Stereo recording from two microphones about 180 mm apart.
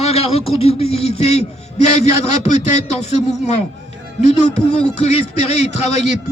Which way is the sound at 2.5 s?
40° left (ahead or behind).